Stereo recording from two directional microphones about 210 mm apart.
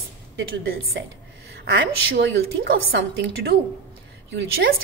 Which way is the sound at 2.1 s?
50° right (ahead or behind).